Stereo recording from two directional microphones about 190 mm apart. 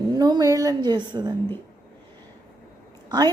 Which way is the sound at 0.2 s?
20° right (ahead or behind).